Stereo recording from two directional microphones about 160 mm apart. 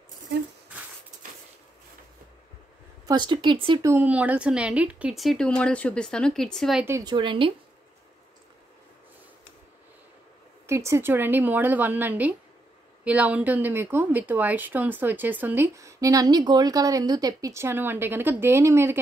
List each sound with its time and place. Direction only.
3.1 s speech: 30° right (ahead or behind)
3.8 s speech: 15° right (ahead or behind); by 6.8 s 5° left (ahead or behind)
7.1 s speech: 30° right (ahead or behind)
10.7 s speech: 15° right (ahead or behind)